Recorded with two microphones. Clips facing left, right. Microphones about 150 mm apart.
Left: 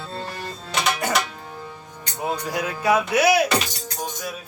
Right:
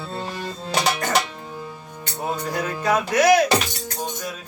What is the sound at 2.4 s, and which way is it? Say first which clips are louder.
Mantra: left 1 dB; 10° left (ahead or behind).